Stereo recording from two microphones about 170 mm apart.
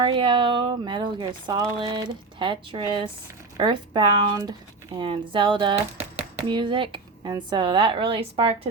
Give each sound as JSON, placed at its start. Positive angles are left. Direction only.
{"t": 0.0, "sound": "speech", "side_deg": -30}